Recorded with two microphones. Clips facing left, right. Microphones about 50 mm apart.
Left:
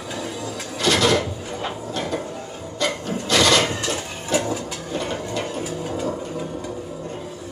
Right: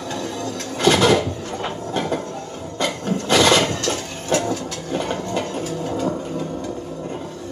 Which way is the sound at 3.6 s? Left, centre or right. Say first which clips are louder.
Right 2 dB; centre.